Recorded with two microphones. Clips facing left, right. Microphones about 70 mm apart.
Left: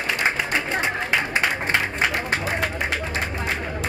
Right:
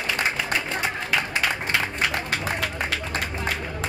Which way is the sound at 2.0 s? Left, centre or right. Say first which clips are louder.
Left 3 dB; left.